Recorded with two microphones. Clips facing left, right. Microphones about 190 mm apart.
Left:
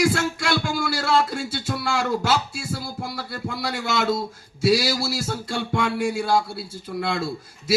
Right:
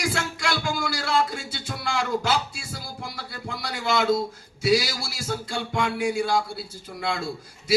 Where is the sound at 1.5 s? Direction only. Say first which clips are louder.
Left 3 dB; 55° left (ahead or behind).